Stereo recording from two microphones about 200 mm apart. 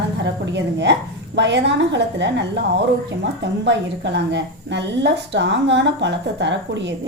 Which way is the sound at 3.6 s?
60° right (ahead or behind).